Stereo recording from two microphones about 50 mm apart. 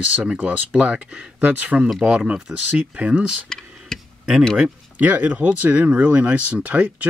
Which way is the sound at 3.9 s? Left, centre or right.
Centre.